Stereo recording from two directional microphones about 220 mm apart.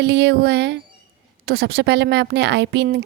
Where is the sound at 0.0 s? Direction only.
50° right (ahead or behind).